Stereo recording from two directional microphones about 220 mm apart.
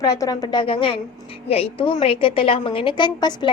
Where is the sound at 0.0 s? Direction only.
15° left (ahead or behind).